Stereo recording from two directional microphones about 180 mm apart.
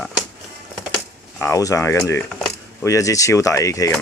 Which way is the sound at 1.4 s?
15° left (ahead or behind).